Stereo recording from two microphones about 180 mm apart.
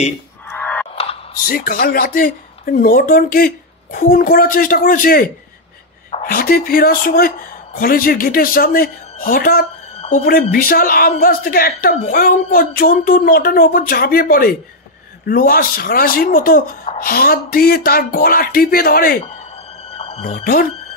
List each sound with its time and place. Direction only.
0.5 s a sound: 10° left (ahead or behind)
1.3 s a woman's voice: 55° left (ahead or behind)
19.9 s music: 35° left (ahead or behind)